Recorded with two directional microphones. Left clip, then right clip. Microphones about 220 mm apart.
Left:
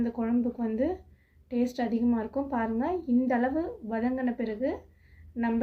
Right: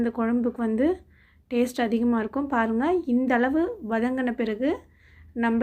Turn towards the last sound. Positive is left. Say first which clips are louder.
# right 6 dB
turn(degrees=-25)  # may be behind; listen again after turning